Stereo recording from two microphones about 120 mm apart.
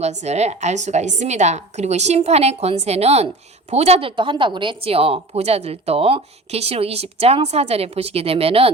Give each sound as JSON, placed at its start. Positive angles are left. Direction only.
{"t": 0.0, "sound": "a woman's voice", "side_deg": -65}